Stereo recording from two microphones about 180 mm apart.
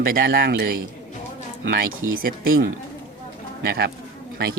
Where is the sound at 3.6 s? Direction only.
60° right (ahead or behind).